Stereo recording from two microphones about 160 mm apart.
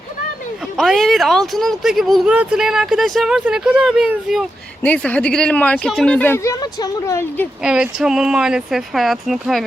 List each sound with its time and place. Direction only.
0.8 s speech: centre (ahead or behind)
4.8 s a woman's voice: 10° left (ahead or behind)
7.6 s speech: 5° right (ahead or behind)